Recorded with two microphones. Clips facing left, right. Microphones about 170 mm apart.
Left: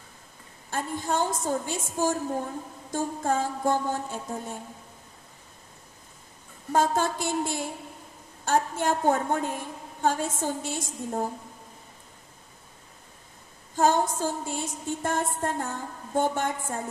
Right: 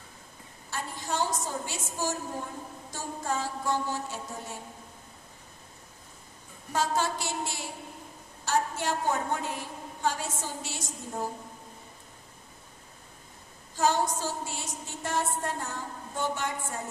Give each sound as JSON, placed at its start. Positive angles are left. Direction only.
{"t": 0.7, "sound": "music", "side_deg": 50}
{"t": 6.7, "sound": "music", "side_deg": 50}
{"t": 13.7, "sound": "music", "side_deg": 50}